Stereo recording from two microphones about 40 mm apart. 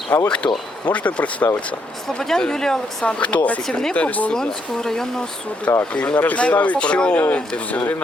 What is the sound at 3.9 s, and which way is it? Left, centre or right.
Speech, left.